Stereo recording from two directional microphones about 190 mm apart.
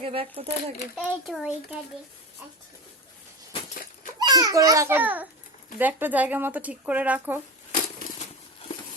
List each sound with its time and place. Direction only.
0.0 s speech: 30° right (ahead or behind)
0.9 s a child's voice: centre (ahead or behind)
4.2 s a child's voice: 20° right (ahead or behind)
7.7 s a sound: 45° left (ahead or behind)